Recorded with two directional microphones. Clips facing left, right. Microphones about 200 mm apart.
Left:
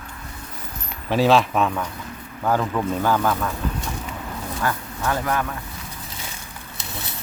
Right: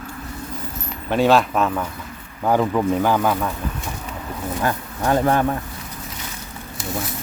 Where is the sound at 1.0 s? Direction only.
Centre (ahead or behind).